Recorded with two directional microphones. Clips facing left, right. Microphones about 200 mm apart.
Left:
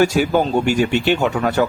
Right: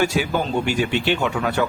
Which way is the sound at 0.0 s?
45° left (ahead or behind).